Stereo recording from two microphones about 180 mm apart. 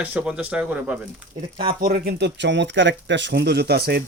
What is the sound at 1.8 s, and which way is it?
Speech, 55° right (ahead or behind).